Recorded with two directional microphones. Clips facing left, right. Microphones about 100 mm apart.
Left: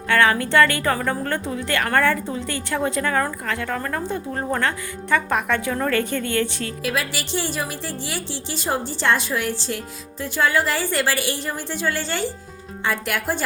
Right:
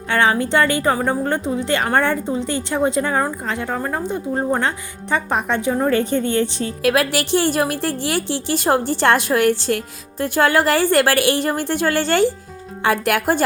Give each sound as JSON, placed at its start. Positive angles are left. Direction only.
{"t": 0.1, "sound": "a woman's voice", "side_deg": -20}
{"t": 6.8, "sound": "a woman's voice", "side_deg": -60}